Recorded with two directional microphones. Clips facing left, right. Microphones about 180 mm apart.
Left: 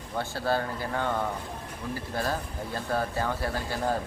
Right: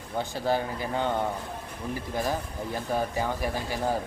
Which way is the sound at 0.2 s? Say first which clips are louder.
Right 1 dB; 15° right (ahead or behind).